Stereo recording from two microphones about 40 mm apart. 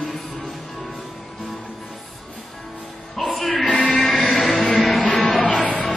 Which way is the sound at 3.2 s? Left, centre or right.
Centre.